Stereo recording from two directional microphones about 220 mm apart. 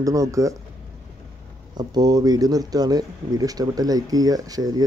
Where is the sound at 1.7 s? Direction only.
20° right (ahead or behind).